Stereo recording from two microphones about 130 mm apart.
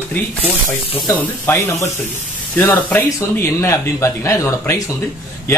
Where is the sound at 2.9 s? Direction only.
15° left (ahead or behind).